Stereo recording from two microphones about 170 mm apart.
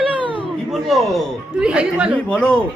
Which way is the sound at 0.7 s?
Centre (ahead or behind).